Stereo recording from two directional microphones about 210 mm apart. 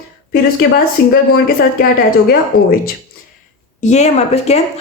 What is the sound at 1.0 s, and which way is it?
Speech, 50° left (ahead or behind).